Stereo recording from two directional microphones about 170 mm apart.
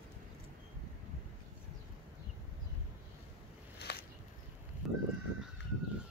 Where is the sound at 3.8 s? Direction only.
75° left (ahead or behind).